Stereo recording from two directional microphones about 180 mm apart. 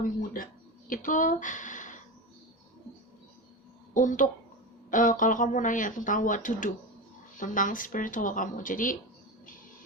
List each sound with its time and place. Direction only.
0.9 s speech: 45° left (ahead or behind)
3.9 s speech: 45° left (ahead or behind)